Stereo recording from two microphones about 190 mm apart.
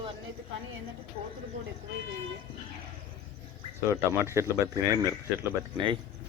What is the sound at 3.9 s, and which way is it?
Speech, 15° right (ahead or behind).